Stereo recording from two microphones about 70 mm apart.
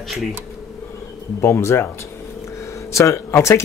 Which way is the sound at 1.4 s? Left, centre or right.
Left.